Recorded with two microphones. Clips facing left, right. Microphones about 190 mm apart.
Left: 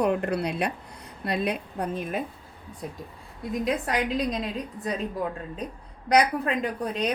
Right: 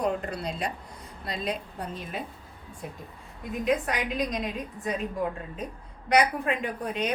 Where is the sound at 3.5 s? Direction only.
35° left (ahead or behind).